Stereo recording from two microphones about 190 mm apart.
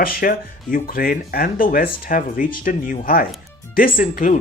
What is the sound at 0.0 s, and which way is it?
Speech, 50° left (ahead or behind).